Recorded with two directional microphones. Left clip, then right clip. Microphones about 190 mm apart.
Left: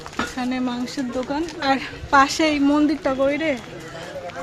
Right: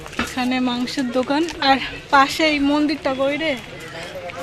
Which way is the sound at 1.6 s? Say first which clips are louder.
Right 4 dB; 10° right (ahead or behind).